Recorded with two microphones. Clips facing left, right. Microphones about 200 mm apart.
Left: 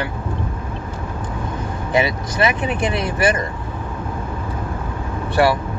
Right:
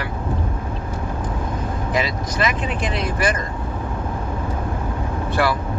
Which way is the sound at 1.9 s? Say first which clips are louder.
Left 5 dB; 25° left (ahead or behind).